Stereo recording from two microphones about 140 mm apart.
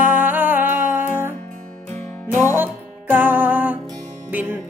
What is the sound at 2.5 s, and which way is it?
Music, 15° right (ahead or behind).